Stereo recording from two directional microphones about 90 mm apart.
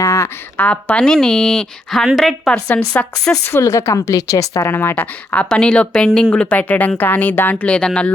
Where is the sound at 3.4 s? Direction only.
30° left (ahead or behind); by 8.1 s 10° left (ahead or behind).